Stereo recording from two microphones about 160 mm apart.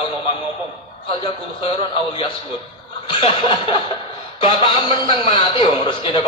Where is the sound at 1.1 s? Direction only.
30° left (ahead or behind).